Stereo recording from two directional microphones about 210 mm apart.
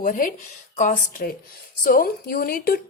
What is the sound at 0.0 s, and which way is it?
A woman's voice, 40° left (ahead or behind).